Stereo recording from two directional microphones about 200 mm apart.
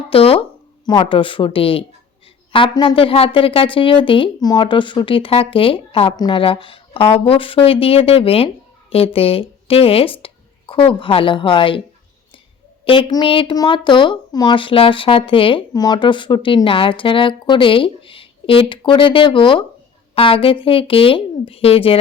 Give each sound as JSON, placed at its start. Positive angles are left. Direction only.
{"t": 0.1, "sound": "a sound", "side_deg": 30}
{"t": 0.9, "sound": "speech", "side_deg": 25}
{"t": 12.8, "sound": "speech", "side_deg": 25}